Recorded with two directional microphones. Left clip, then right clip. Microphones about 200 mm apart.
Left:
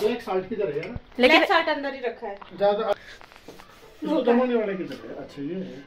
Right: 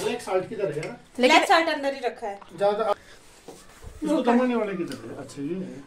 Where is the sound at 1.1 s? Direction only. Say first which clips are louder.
Left 1 dB; 5° right (ahead or behind).